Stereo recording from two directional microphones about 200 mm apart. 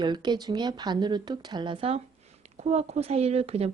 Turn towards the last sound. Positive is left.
turn(degrees=-30)  # may be behind; listen again after turning